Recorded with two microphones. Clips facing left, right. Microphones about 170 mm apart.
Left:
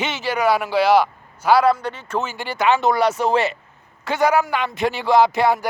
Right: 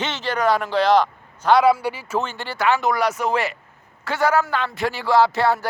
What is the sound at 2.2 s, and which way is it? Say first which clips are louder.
Speech: left 3 dB; 10° left (ahead or behind).